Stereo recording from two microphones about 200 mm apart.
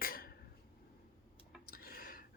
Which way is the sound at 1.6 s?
50° left (ahead or behind).